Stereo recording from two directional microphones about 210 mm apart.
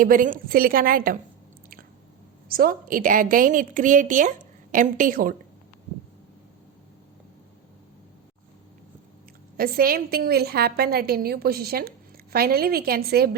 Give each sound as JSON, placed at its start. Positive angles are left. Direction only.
{"t": 0.0, "sound": "a woman's voice", "side_deg": -40}
{"t": 2.5, "sound": "a woman's voice", "side_deg": -45}
{"t": 9.6, "sound": "a woman's voice", "side_deg": -45}